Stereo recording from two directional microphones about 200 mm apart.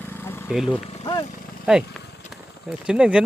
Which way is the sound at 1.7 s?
5° right (ahead or behind).